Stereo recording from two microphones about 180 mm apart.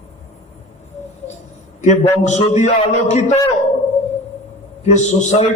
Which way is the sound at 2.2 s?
40° left (ahead or behind).